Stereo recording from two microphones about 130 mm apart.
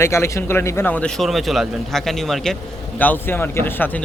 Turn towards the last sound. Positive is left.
turn(degrees=15)  # may be behind; listen again after turning